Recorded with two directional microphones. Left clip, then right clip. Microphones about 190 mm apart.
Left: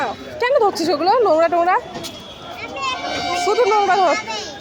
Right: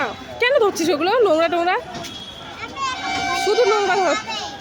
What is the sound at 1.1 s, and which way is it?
Speech, 20° right (ahead or behind).